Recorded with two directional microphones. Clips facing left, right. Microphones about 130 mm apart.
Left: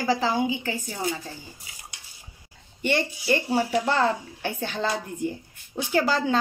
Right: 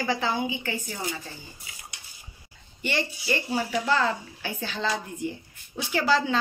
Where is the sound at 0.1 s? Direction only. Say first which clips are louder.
Left 5 dB; 35° left (ahead or behind).